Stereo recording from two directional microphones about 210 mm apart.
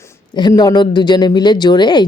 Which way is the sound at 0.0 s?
20° left (ahead or behind).